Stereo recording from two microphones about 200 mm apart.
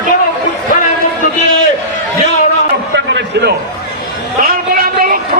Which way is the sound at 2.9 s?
60° right (ahead or behind).